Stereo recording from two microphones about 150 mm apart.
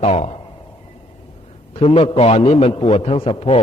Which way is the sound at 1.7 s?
40° left (ahead or behind).